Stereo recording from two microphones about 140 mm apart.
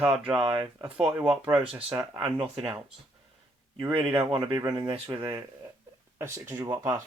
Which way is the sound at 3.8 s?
40° right (ahead or behind).